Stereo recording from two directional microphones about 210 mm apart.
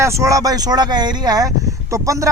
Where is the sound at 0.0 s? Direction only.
15° right (ahead or behind).